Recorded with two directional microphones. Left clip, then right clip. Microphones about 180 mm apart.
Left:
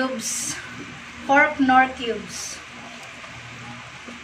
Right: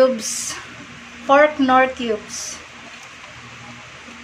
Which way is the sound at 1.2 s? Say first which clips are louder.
Right 4 dB; 55° right (ahead or behind).